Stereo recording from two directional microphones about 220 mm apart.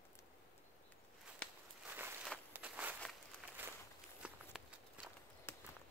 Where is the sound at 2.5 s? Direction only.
5° right (ahead or behind).